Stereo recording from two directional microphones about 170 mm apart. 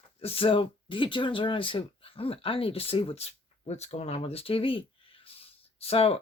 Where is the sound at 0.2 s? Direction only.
35° left (ahead or behind).